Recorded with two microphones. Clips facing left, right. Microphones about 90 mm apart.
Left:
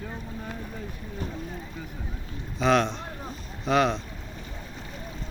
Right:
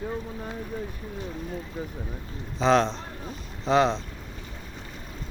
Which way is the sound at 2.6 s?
30° right (ahead or behind).